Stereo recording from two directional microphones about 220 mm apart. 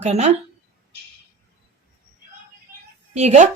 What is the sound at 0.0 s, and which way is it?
Speech, 30° right (ahead or behind).